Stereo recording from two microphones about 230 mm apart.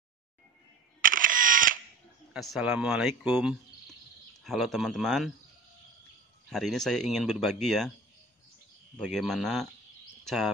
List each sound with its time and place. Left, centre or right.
1.0 s camera: right
2.3 s speech: centre
6.5 s speech: centre
8.9 s speech: centre